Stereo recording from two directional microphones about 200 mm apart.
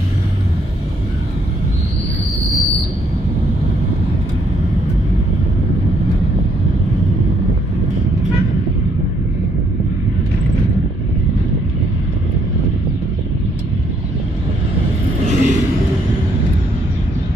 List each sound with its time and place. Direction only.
15.2 s vehicle: 40° right (ahead or behind)